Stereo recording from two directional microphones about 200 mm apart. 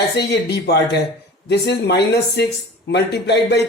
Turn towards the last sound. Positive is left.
turn(degrees=55)  # may be behind; listen again after turning